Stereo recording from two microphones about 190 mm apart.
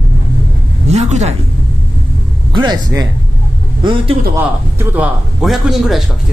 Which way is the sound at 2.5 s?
25° right (ahead or behind).